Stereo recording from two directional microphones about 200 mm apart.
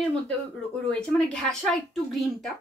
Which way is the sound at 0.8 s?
5° left (ahead or behind).